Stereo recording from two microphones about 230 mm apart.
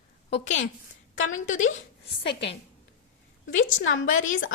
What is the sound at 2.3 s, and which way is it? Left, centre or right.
Speech, left.